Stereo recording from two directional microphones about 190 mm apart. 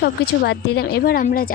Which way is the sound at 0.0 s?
60° left (ahead or behind).